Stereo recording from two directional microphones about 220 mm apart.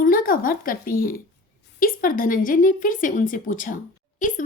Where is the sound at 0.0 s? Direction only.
40° left (ahead or behind).